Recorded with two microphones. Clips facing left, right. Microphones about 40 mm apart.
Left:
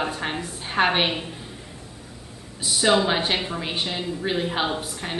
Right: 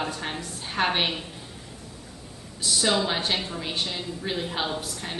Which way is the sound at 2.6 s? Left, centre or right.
Centre.